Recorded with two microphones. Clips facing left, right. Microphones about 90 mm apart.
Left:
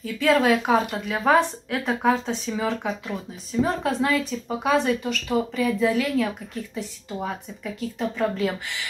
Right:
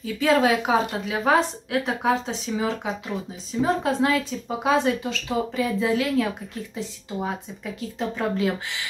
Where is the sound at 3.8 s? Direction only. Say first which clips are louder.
Right 1 dB; 20° right (ahead or behind).